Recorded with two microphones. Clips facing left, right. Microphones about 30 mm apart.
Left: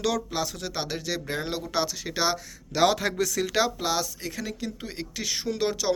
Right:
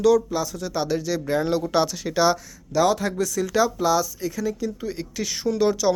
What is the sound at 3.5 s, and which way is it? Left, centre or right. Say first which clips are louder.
Speech: right 5 dB; left.